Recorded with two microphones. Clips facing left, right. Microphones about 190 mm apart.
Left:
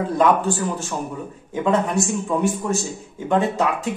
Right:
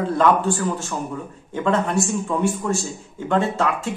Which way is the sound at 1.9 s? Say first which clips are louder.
Even; 20° left (ahead or behind).